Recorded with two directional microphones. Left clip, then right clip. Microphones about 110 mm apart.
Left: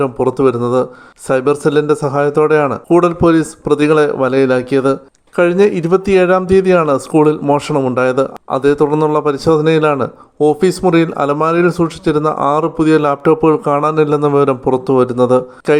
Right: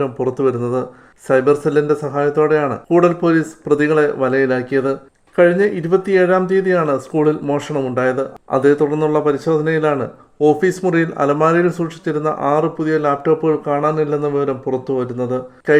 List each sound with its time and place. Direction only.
0.0 s speech: 25° left (ahead or behind)